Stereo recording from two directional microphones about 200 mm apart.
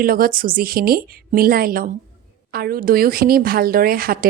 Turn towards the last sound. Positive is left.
turn(degrees=-45)  # may be behind; listen again after turning